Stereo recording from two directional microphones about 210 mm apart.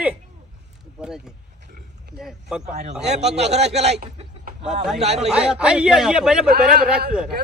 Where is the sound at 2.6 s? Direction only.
30° right (ahead or behind).